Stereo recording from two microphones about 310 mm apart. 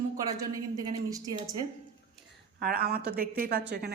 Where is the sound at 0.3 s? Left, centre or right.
Centre.